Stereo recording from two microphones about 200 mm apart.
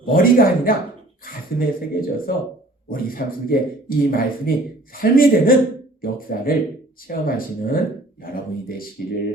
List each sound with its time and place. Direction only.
0.0 s speech: 45° left (ahead or behind)
9.0 s speech: 50° left (ahead or behind)